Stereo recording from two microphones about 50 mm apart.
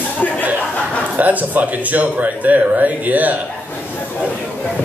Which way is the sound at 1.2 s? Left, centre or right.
Right.